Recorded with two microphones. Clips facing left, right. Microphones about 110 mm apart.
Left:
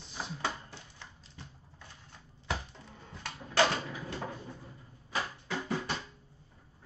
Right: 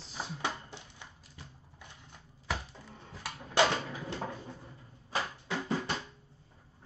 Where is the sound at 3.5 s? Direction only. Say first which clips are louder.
Even; 20° right (ahead or behind).